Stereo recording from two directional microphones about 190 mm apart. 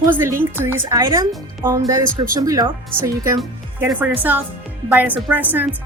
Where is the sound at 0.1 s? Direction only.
10° right (ahead or behind).